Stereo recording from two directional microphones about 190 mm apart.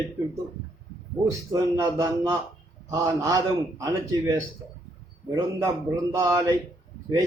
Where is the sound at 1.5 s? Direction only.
20° right (ahead or behind).